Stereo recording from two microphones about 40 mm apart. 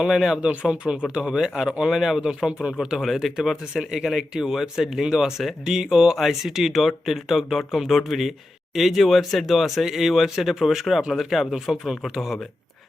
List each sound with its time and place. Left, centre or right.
0.1 s speech: centre
0.4 s speech: right
3.3 s speech: centre